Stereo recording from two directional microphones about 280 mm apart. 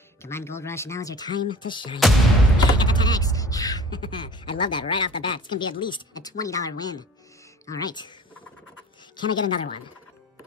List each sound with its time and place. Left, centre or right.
0.2 s speech: centre
9.1 s speech: centre